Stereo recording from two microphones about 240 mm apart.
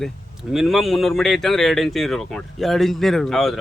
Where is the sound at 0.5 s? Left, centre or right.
Centre.